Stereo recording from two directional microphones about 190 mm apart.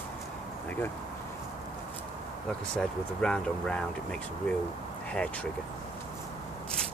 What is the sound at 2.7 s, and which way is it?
Speech, 5° left (ahead or behind).